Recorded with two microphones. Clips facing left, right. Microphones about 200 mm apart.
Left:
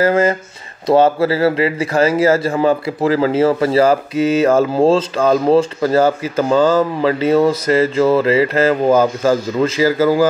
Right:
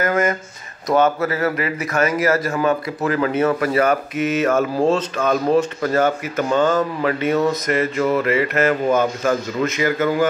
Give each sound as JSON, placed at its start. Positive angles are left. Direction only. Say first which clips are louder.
{"t": 0.0, "sound": "speech", "louder": "left 5 dB", "side_deg": 30}